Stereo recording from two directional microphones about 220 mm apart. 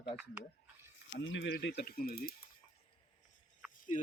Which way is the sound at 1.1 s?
60° left (ahead or behind).